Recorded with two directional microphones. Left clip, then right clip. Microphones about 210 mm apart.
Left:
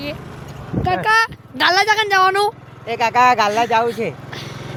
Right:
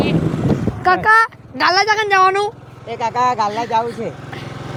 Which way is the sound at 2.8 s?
30° left (ahead or behind).